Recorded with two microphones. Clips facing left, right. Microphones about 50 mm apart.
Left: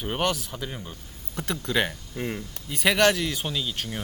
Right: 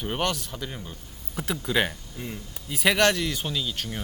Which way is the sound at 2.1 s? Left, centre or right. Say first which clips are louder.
Left 5 dB; left.